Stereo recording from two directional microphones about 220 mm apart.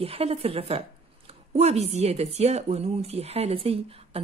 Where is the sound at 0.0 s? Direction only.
25° right (ahead or behind).